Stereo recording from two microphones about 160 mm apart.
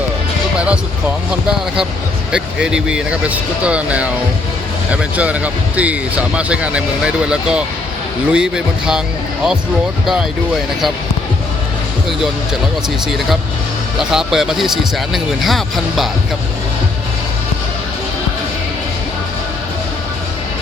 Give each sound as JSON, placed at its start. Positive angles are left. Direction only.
{"t": 1.5, "sound": "a man's voice", "side_deg": -5}
{"t": 14.0, "sound": "a man's voice", "side_deg": -5}